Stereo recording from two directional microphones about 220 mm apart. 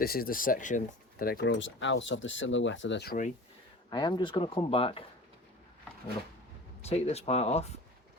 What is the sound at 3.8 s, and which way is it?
Speech, 20° left (ahead or behind).